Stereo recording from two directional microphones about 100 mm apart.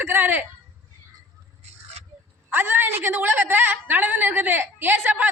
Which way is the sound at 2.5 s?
20° right (ahead or behind).